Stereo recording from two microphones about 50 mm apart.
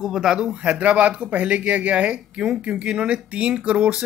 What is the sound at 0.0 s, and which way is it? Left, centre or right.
Speech, centre.